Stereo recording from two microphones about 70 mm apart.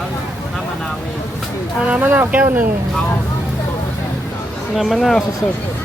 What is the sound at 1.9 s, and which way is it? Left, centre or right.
Speech, right.